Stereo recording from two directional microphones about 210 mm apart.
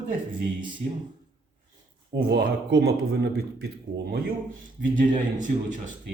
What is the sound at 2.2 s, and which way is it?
A man's voice, 50° right (ahead or behind).